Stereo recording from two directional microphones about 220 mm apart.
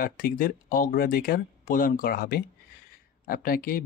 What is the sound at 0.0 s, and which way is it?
Speech, 40° left (ahead or behind).